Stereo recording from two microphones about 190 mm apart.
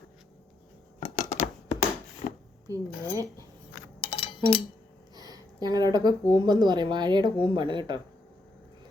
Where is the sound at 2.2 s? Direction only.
40° left (ahead or behind).